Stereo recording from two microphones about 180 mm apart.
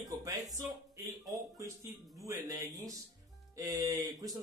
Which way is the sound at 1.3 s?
20° right (ahead or behind).